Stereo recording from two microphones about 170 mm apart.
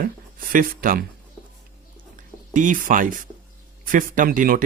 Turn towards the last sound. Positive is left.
turn(degrees=-55)  # may be behind; listen again after turning